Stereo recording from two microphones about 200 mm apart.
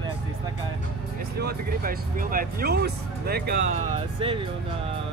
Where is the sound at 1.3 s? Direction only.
50° right (ahead or behind).